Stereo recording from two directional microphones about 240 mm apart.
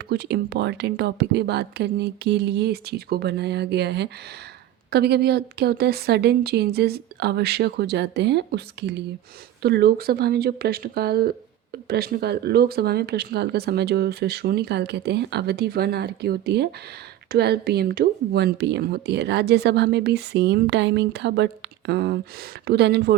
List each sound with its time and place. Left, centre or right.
0.1 s speech: right